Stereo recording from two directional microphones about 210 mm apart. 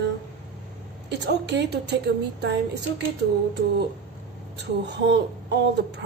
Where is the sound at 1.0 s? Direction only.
55° right (ahead or behind).